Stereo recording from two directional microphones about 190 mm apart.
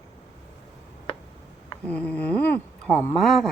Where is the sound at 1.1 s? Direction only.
30° left (ahead or behind).